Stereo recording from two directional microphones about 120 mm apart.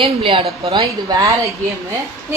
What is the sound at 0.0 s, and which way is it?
Speech, 45° right (ahead or behind).